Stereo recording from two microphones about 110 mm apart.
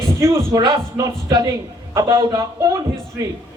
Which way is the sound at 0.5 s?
35° right (ahead or behind).